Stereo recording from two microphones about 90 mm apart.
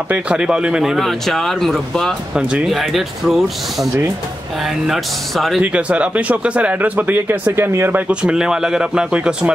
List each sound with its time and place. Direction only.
0.1 s speech: 10° right (ahead or behind)
5.6 s speech: 15° right (ahead or behind)
8.1 s speech: 10° right (ahead or behind)